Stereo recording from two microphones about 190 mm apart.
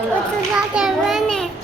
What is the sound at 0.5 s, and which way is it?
Child singing, 5° right (ahead or behind).